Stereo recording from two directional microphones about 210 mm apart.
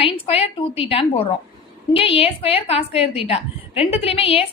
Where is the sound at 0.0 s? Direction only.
25° left (ahead or behind).